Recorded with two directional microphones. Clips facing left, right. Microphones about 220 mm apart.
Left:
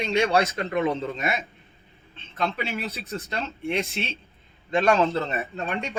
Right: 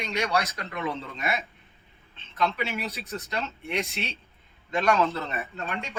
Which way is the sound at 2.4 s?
30° left (ahead or behind).